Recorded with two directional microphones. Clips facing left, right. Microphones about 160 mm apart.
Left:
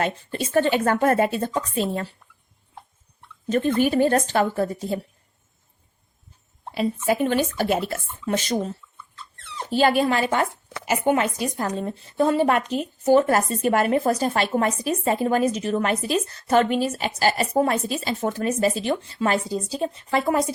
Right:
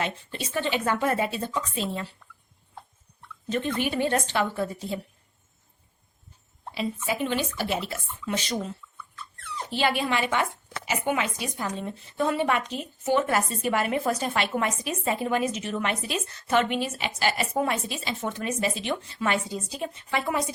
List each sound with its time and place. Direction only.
0.0 s speech: 45° left (ahead or behind)
3.5 s speech: 45° left (ahead or behind)
6.7 s a woman's voice: 50° left (ahead or behind)